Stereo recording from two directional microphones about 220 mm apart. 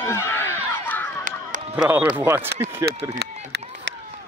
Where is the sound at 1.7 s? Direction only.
5° right (ahead or behind).